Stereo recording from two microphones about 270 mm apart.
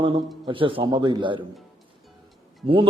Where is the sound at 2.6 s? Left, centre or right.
Centre.